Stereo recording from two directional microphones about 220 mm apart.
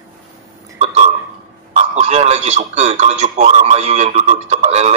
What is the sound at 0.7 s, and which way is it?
Burping, 30° right (ahead or behind).